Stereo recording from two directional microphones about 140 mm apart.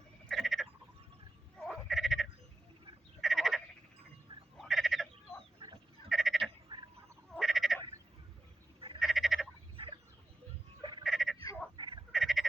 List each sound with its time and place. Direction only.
0.3 s frog: centre (ahead or behind)
5.5 s fowl: 35° right (ahead or behind)
6.1 s frog: centre (ahead or behind)
6.7 s a sound: 30° right (ahead or behind)
7.3 s frog: centre (ahead or behind)
9.0 s frog: centre (ahead or behind)
9.7 s fowl: 40° right (ahead or behind)
11.0 s frog: centre (ahead or behind)
11.8 s frog: 30° right (ahead or behind)
12.1 s frog: centre (ahead or behind)